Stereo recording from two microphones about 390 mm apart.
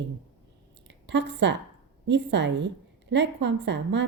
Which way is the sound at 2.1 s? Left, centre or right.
Right.